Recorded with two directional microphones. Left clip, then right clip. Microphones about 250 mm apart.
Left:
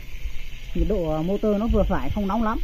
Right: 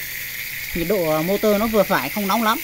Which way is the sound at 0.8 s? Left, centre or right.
Centre.